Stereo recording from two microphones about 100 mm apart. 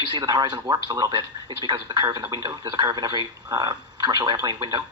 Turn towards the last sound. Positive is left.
turn(degrees=-40)  # may be behind; listen again after turning